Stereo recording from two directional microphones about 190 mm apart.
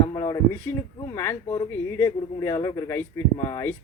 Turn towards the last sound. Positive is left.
turn(degrees=15)  # may be behind; listen again after turning